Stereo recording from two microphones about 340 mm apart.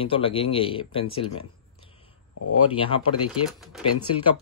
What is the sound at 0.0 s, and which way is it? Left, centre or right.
Speech, centre.